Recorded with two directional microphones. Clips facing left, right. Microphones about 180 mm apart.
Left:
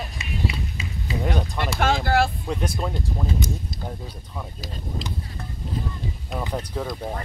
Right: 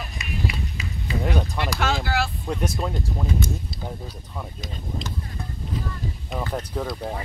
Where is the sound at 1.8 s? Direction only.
50° left (ahead or behind).